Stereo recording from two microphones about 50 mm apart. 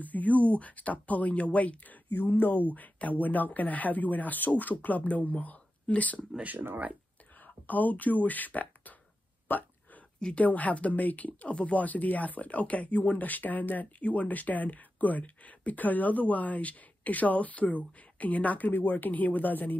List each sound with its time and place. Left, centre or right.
0.0 s speech: left
7.4 s speech: left